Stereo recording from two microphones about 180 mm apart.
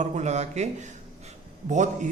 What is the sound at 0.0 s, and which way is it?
A man's voice, 40° right (ahead or behind).